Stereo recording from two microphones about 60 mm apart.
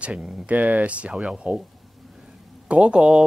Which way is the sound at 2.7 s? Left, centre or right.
Centre.